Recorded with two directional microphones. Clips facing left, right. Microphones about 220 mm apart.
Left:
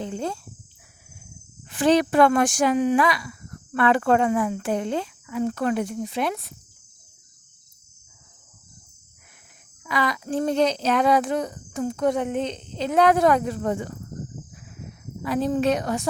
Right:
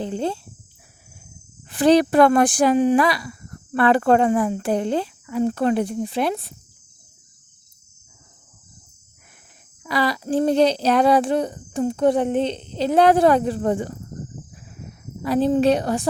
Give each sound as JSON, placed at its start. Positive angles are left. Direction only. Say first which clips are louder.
{"t": 0.0, "sound": "speech", "louder": "right 4 dB", "side_deg": -30}
{"t": 1.6, "sound": "speech", "louder": "right 4 dB", "side_deg": -35}
{"t": 9.8, "sound": "speech", "louder": "right 3 dB", "side_deg": -35}
{"t": 15.2, "sound": "speech", "louder": "right 5 dB", "side_deg": -30}